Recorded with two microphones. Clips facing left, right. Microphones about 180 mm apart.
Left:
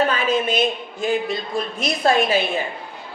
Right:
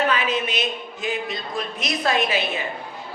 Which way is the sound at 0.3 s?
50° left (ahead or behind).